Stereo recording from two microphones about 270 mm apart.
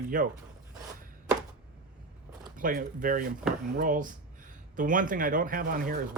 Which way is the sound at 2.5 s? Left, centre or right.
Right.